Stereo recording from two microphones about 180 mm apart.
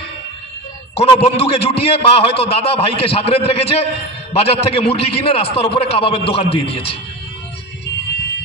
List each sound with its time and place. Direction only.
0.9 s a man's voice: 35° left (ahead or behind)